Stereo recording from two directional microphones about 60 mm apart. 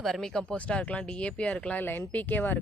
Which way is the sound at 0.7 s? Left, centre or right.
Left.